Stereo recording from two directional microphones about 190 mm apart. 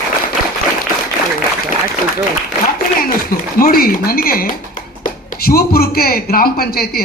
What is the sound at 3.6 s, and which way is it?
Speech, 50° left (ahead or behind).